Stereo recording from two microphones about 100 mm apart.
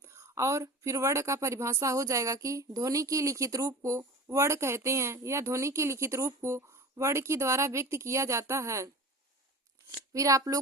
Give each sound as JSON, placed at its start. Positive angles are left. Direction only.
{"t": 0.0, "sound": "speech", "side_deg": -30}
{"t": 10.1, "sound": "speech", "side_deg": -35}